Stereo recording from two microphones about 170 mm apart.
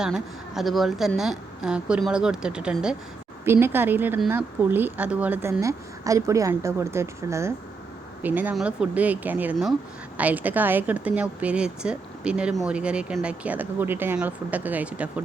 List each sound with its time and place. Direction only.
0.0 s a woman's voice: centre (ahead or behind)